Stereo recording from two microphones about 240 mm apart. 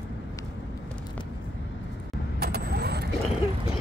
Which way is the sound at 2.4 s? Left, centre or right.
Right.